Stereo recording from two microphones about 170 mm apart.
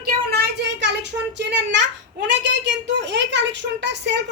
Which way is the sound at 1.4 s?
90° right.